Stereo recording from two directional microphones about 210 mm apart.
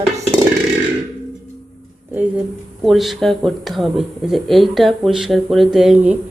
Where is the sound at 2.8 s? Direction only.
Centre (ahead or behind).